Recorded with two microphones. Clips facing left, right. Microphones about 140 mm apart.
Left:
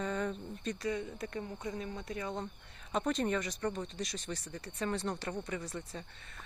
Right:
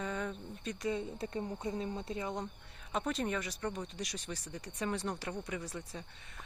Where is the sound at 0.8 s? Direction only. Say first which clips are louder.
Right 3 dB; 25° right (ahead or behind).